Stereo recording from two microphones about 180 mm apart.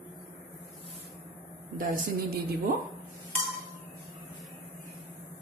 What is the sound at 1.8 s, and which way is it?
Speech, 60° right (ahead or behind).